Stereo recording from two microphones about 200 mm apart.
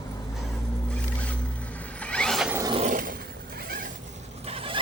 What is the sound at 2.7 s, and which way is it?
Roar, 35° right (ahead or behind).